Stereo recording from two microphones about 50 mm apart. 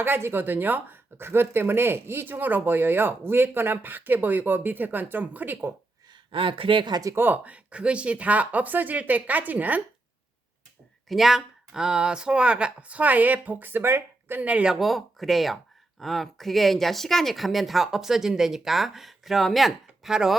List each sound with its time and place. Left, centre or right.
0.0 s speech: right
7.2 s speech: right
11.1 s speech: centre; by 14.4 s right
14.4 s speech: right
14.7 s speech: centre
19.5 s a sound: centre
20.1 s speech: centre